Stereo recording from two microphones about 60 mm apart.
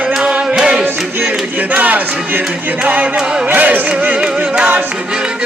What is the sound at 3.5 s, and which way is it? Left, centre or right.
Music, right.